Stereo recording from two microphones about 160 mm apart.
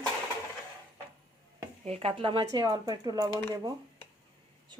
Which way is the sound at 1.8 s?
40° right (ahead or behind).